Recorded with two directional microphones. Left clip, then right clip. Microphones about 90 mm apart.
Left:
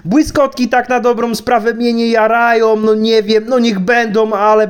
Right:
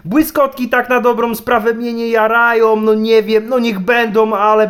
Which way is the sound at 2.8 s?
30° left (ahead or behind).